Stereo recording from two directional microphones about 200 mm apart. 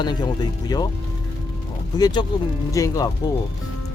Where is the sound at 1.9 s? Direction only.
20° left (ahead or behind).